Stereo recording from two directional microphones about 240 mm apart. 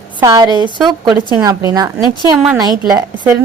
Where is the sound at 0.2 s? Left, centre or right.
Centre.